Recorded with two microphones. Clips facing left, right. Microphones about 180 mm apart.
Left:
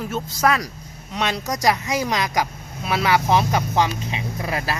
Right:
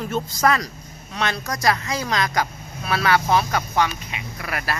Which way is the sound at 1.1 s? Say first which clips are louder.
Left 2 dB; 15° left (ahead or behind).